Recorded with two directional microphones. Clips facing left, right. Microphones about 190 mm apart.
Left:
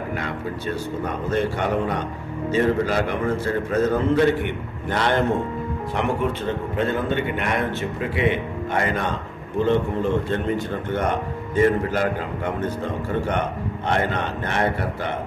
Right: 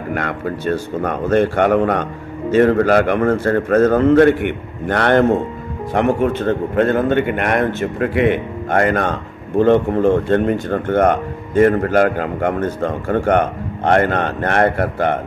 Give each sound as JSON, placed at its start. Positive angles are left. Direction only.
{"t": 0.1, "sound": "a man's voice", "side_deg": -65}